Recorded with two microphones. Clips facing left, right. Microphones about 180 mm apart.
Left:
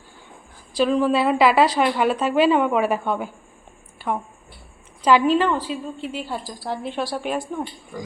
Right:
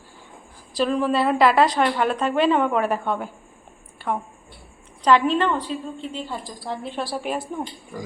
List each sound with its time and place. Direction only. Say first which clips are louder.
0.7 s a woman's voice: left 3 dB; centre (ahead or behind)
4.0 s a sound: left 1 dB; 5° left (ahead or behind)
5.0 s a woman's voice: left 1 dB; 5° left (ahead or behind)